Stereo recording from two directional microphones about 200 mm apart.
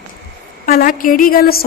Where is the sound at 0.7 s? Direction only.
45° left (ahead or behind).